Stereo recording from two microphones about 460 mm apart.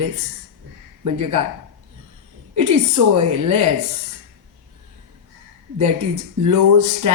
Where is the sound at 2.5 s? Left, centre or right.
Right.